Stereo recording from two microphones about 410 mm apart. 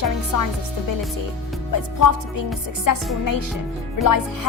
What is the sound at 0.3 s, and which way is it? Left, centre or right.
Speech, left.